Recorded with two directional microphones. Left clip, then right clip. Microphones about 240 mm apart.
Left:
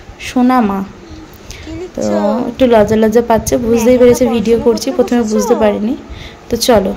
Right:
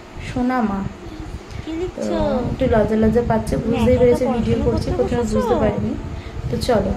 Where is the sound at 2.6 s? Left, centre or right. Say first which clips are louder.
Left 9 dB; left.